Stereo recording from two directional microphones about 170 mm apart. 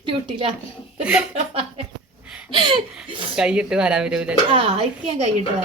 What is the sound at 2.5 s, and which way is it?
Speech, 30° right (ahead or behind).